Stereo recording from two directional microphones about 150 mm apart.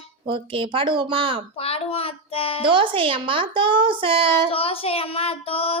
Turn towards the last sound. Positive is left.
turn(degrees=40)  # may be behind; listen again after turning